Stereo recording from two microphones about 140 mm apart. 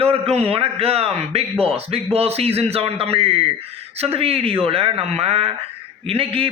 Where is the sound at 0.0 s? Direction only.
45° right (ahead or behind).